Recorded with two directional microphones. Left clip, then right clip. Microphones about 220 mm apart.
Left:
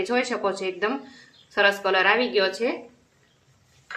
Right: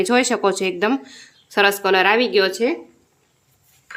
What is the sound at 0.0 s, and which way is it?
Speech, 50° right (ahead or behind).